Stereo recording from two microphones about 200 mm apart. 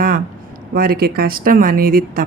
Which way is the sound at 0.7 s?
45° right (ahead or behind).